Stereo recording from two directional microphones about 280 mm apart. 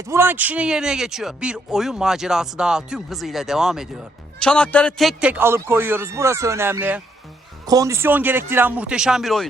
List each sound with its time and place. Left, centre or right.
0.0 s a man's voice: centre